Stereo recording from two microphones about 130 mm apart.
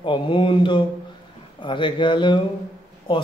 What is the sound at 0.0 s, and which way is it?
Speech, 40° left (ahead or behind).